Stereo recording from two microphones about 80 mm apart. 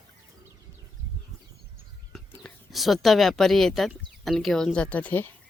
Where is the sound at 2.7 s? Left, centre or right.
Centre.